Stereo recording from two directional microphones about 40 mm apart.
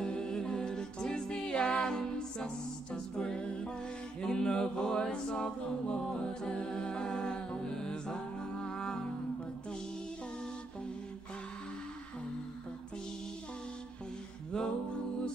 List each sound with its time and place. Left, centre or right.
0.0 s music: centre
4.2 s a capella: centre
6.1 s music: left
14.5 s music: left